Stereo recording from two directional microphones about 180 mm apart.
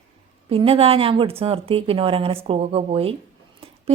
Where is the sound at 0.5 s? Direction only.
30° right (ahead or behind).